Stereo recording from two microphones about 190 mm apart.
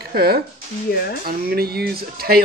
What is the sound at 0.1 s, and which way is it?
Speech, 55° right (ahead or behind).